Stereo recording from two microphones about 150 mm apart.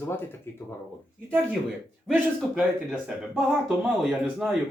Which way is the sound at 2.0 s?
Centre (ahead or behind).